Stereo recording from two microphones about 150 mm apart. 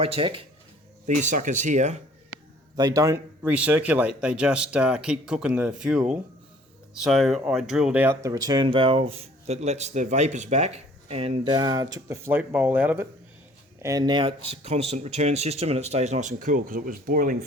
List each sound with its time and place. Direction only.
0.0 s speech: 40° right (ahead or behind)
1.0 s speech: 55° right (ahead or behind)
2.7 s a man's voice: 25° right (ahead or behind)
3.4 s speech: 10° right (ahead or behind); by 11.5 s 40° right (ahead or behind)
11.5 s speech: 25° right (ahead or behind); by 13.1 s 10° right (ahead or behind)
13.8 s speech: 25° right (ahead or behind); by 17.3 s 65° right (ahead or behind)